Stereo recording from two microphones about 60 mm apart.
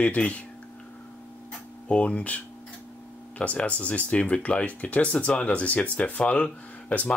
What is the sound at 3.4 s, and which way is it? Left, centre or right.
Speech, left.